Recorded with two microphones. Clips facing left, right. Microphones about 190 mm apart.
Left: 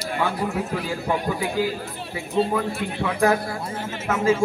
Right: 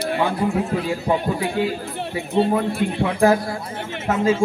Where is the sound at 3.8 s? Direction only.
65° right (ahead or behind).